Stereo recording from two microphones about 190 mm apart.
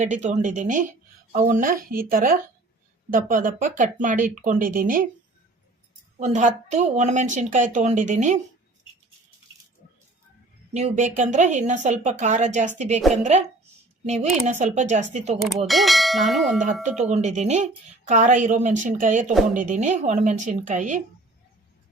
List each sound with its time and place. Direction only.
0.0 s speech: 40° right (ahead or behind)
6.1 s speech: 40° right (ahead or behind)
10.8 s speech: 40° right (ahead or behind)
15.6 s bell: centre (ahead or behind)
17.1 s speech: 40° right (ahead or behind)